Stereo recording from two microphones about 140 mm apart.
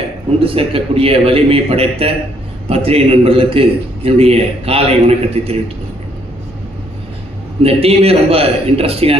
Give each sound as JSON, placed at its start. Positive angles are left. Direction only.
{"t": 0.4, "sound": "a man's voice", "side_deg": -40}
{"t": 7.6, "sound": "a man's voice", "side_deg": -45}